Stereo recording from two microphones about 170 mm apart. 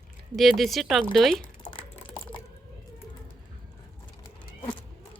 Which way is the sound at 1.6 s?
30° left (ahead or behind).